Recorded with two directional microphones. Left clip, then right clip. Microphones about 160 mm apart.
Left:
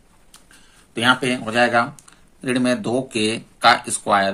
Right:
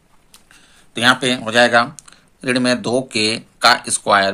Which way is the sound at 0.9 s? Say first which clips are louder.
Right 3 dB; 30° right (ahead or behind).